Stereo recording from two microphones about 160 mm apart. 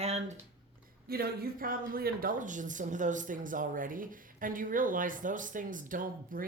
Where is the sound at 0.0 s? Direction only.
45° right (ahead or behind).